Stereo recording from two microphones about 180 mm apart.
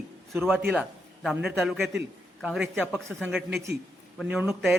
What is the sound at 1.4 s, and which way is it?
A man's voice, centre (ahead or behind).